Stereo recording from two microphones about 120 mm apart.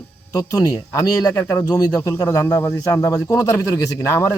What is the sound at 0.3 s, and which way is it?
A man's voice, 35° left (ahead or behind).